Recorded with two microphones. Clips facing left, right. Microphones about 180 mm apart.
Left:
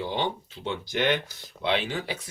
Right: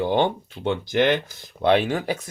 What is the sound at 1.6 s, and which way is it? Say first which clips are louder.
Speech: right 8 dB; 45° right (ahead or behind).